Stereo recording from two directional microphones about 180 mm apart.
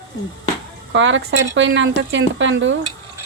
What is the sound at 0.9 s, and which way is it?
Speech, 90° right.